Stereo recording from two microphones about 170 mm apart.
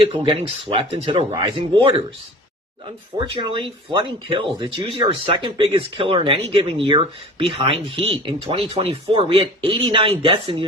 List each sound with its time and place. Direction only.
0.3 s speech: 30° right (ahead or behind)
3.2 s speech: 30° right (ahead or behind)